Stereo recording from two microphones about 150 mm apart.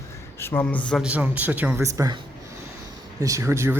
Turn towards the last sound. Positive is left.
turn(degrees=-20)  # may be behind; listen again after turning